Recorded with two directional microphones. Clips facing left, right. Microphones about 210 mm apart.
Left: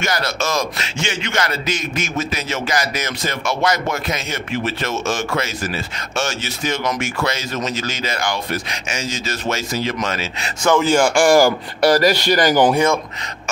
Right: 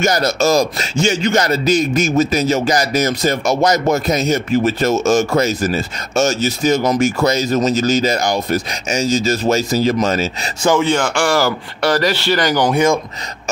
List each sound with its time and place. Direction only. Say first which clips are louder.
0.0 s a man's voice: right 7 dB; 40° right (ahead or behind)
10.8 s speech: left 2 dB; 10° left (ahead or behind)